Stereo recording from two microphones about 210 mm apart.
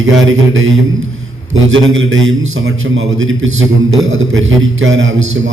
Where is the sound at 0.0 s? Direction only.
75° right (ahead or behind).